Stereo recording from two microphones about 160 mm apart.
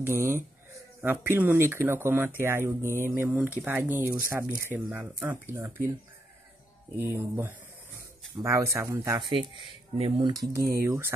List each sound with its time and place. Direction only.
0.0 s speech: 15° right (ahead or behind)
7.0 s speech: 15° right (ahead or behind)
9.9 s speech: 35° right (ahead or behind)
10.5 s speech: 20° right (ahead or behind)